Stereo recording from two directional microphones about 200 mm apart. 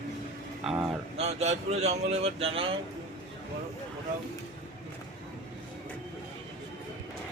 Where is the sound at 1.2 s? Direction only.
30° right (ahead or behind).